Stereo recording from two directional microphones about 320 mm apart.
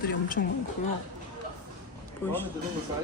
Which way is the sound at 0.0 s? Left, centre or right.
Left.